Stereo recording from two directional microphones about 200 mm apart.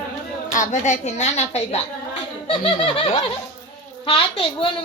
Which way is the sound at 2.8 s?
25° left (ahead or behind).